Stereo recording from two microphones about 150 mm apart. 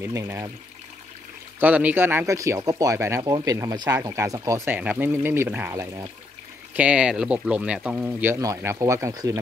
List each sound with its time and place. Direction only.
0.0 s speech: 20° right (ahead or behind)
1.6 s speech: 10° right (ahead or behind)
4.7 s speech: 10° right (ahead or behind)
6.7 s speech: 10° right (ahead or behind)